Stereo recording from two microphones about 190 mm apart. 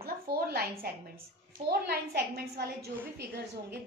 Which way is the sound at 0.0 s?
55° right (ahead or behind).